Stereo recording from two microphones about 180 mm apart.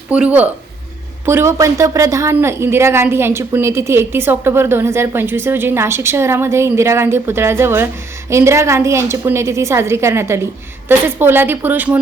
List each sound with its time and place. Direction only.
0.1 s speech: 5° right (ahead or behind)